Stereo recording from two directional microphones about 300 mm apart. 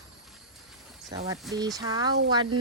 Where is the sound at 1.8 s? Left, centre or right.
Centre.